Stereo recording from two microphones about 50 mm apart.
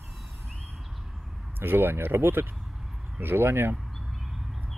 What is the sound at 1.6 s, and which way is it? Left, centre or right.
Speech, right.